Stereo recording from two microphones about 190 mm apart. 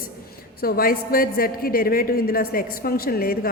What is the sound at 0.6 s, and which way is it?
Speech, 50° left (ahead or behind).